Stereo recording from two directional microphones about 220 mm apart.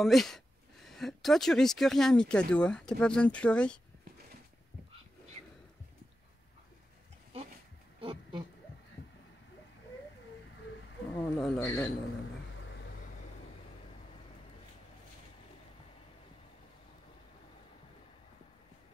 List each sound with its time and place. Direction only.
0.0 s speech: centre (ahead or behind)
8.0 s a sound: 20° right (ahead or behind)
11.1 s speech: 5° left (ahead or behind)